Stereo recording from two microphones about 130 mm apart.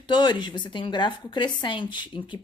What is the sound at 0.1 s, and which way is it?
Speech, 35° left (ahead or behind).